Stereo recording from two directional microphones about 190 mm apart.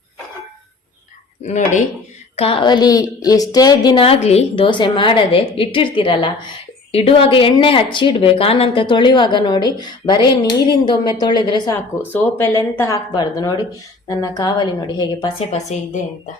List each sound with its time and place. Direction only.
1.5 s a woman's voice: 40° left (ahead or behind); by 11.7 s 20° left (ahead or behind)
11.7 s a woman's voice: 10° left (ahead or behind)
15.4 s a woman's voice: 35° left (ahead or behind)